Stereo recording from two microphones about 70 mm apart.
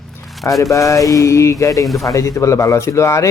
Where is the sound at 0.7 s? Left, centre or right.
Left.